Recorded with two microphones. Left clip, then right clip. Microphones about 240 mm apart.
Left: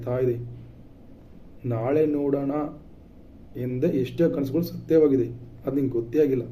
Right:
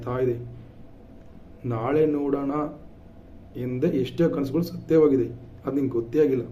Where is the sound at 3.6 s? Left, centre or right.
Centre.